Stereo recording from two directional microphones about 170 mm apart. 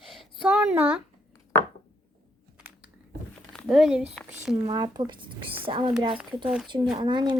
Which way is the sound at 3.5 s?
Centre (ahead or behind).